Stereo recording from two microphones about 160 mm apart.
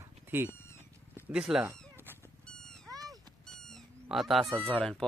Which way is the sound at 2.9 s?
20° right (ahead or behind).